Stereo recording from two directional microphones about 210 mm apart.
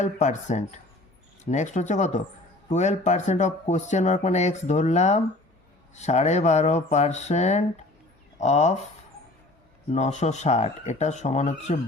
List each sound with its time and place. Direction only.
0.0 s speech: 35° left (ahead or behind)
9.9 s speech: 35° left (ahead or behind)